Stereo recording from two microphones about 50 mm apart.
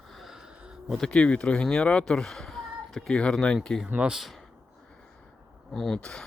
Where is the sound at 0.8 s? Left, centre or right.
Centre.